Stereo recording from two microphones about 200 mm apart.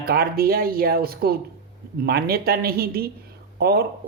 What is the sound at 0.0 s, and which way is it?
Speech, 50° right (ahead or behind).